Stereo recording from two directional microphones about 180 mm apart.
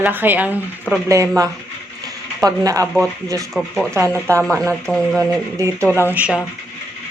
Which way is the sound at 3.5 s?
Centre (ahead or behind).